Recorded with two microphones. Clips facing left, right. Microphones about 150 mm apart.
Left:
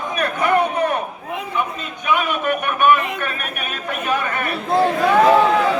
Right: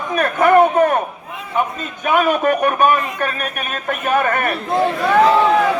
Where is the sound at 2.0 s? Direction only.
45° right (ahead or behind).